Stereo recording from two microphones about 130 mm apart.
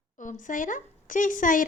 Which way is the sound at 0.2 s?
85° left.